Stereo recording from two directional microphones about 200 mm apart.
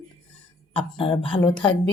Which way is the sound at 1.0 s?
25° left (ahead or behind).